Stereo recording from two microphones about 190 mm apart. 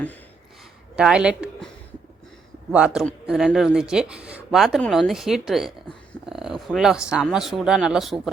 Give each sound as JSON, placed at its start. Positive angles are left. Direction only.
{"t": 0.9, "sound": "a woman's voice", "side_deg": -5}
{"t": 2.7, "sound": "speech", "side_deg": -5}